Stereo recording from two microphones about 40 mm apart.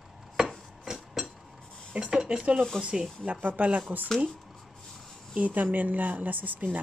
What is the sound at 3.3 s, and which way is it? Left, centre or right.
Speech, right.